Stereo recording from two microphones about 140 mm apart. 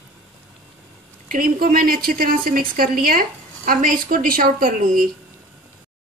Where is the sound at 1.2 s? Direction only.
90° right.